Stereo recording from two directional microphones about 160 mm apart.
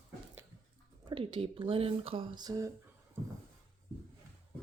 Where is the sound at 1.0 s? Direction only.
35° right (ahead or behind).